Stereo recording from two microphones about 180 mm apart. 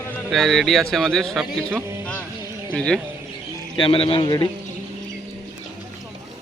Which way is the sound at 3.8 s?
30° left (ahead or behind).